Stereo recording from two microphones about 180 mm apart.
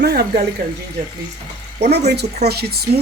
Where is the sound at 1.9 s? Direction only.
65° right (ahead or behind).